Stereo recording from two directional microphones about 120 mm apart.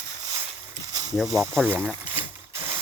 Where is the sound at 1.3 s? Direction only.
25° right (ahead or behind).